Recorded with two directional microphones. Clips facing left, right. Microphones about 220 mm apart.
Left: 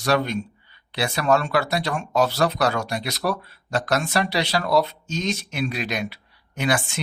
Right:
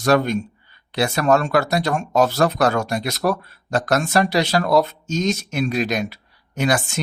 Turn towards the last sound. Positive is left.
turn(degrees=-40)  # may be behind; listen again after turning